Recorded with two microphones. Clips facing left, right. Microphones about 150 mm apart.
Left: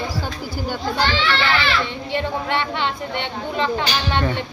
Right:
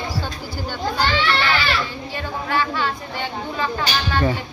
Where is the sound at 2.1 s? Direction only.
25° left (ahead or behind).